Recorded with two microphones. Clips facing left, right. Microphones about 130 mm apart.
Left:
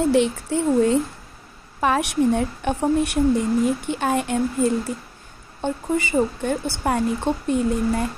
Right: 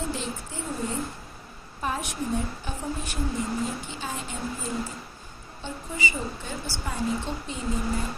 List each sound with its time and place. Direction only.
0.0 s a woman's voice: 70° left (ahead or behind)
5.6 s speech: 55° left (ahead or behind)